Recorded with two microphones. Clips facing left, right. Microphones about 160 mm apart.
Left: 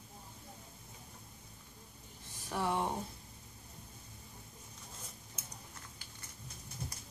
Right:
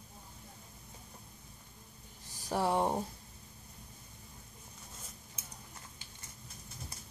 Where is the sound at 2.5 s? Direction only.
35° right (ahead or behind).